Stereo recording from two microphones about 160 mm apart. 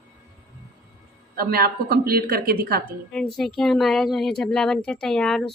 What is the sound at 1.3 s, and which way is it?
A woman's voice, 70° right (ahead or behind).